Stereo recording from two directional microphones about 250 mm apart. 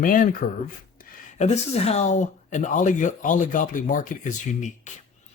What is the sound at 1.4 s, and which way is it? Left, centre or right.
Speech, left.